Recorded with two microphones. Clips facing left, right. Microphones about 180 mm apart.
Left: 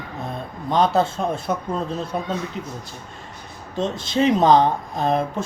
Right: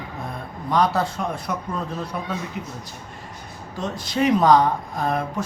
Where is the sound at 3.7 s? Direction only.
25° left (ahead or behind).